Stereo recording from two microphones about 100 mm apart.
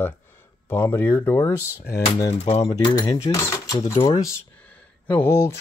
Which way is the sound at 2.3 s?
90° left.